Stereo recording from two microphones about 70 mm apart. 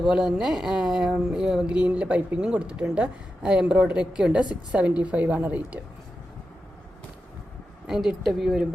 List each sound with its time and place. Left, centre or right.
0.0 s a woman's voice: centre; by 5.8 s right
7.9 s speech: centre